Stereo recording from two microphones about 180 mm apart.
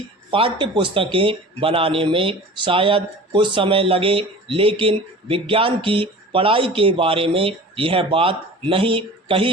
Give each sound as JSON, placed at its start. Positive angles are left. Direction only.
{"t": 0.3, "sound": "speech", "side_deg": -30}